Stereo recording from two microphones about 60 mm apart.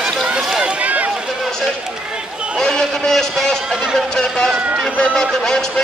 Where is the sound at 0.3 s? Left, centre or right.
Centre.